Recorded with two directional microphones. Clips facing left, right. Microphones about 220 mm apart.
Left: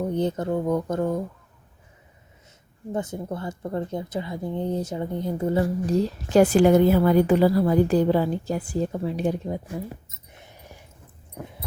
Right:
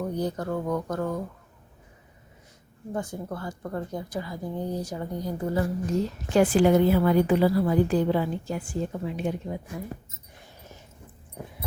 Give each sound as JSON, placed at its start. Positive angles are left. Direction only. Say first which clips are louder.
{"t": 0.0, "sound": "speech", "louder": "left 4 dB", "side_deg": 25}
{"t": 2.9, "sound": "speech", "louder": "left 3 dB", "side_deg": 20}
{"t": 10.3, "sound": "a sound", "louder": "left 2 dB", "side_deg": 20}